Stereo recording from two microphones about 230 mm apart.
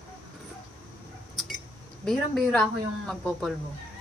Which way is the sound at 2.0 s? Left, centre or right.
Centre.